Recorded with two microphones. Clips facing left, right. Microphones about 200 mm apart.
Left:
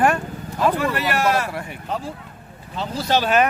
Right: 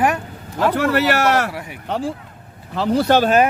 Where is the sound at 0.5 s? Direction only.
75° right (ahead or behind).